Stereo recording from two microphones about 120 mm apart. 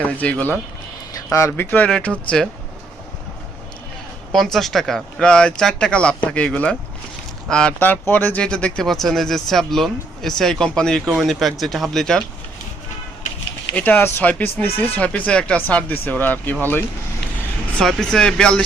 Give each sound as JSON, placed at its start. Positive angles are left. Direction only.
{"t": 0.0, "sound": "speech", "side_deg": 10}
{"t": 1.1, "sound": "speech", "side_deg": 25}
{"t": 4.3, "sound": "speech", "side_deg": 5}
{"t": 13.7, "sound": "speech", "side_deg": 15}
{"t": 17.7, "sound": "speech", "side_deg": 5}